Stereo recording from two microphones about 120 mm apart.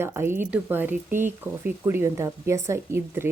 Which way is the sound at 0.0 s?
20° right (ahead or behind).